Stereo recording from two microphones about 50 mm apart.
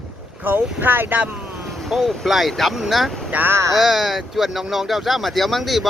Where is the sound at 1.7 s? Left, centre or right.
Centre.